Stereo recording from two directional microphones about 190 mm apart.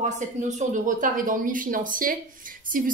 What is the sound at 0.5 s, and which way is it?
A woman's voice, 40° right (ahead or behind).